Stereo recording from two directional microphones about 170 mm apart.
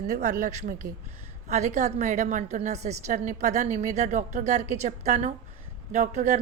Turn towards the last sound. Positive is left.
turn(degrees=-45)  # may be behind; listen again after turning